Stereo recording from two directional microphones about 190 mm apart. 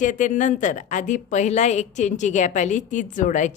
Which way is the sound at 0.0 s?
40° left (ahead or behind).